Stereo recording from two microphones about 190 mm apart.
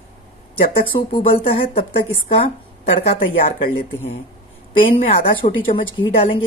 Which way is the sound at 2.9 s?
30° left (ahead or behind).